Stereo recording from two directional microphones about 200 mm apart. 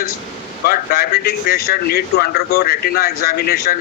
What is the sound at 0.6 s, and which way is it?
Speech, 50° left (ahead or behind).